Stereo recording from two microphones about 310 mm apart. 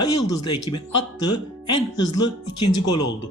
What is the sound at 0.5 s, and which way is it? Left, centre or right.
Speech, left.